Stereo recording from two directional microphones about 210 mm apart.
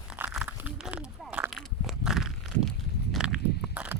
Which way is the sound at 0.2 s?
10° right (ahead or behind).